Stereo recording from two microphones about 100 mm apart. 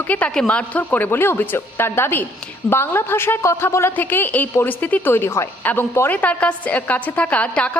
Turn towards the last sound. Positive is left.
turn(degrees=10)  # may be behind; listen again after turning